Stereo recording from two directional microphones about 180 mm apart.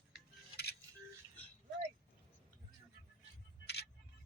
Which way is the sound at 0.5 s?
60° left (ahead or behind).